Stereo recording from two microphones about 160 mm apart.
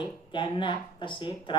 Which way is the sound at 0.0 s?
30° left (ahead or behind).